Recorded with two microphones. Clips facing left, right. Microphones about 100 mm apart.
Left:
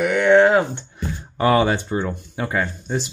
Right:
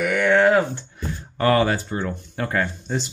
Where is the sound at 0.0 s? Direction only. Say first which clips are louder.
Left 3 dB; 20° left (ahead or behind).